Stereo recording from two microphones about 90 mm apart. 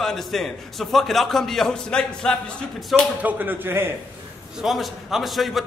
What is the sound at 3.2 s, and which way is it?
Speech, 20° right (ahead or behind).